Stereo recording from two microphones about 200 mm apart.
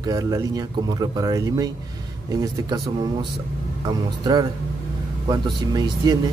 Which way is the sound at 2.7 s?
20° right (ahead or behind).